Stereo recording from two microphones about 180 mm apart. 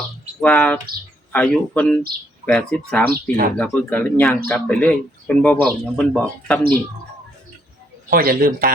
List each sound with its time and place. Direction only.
0.4 s speech: 5° left (ahead or behind)
3.1 s a man's voice: 50° right (ahead or behind)
3.6 s speech: 10° left (ahead or behind)
8.1 s a man's voice: 50° right (ahead or behind)